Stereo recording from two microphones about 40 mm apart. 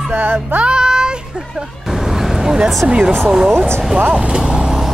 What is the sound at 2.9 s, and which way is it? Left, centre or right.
Speech, right.